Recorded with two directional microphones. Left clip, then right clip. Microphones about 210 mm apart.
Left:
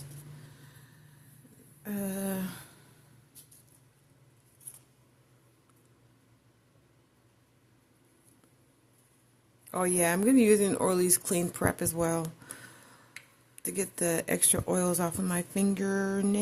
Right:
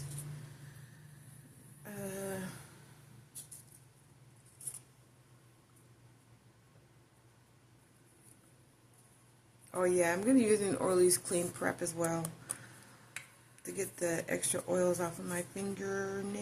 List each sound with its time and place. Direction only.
1.8 s a sound: 55° left (ahead or behind)
9.7 s speech: 55° left (ahead or behind)
13.6 s speech: 55° left (ahead or behind)